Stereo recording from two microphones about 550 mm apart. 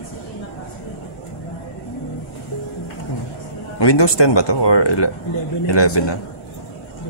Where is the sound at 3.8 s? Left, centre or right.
Left.